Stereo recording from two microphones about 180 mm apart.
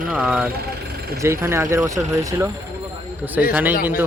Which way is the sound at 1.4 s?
15° right (ahead or behind).